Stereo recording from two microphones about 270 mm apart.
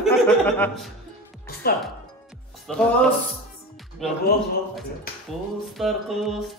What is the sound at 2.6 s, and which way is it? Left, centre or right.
Music, centre.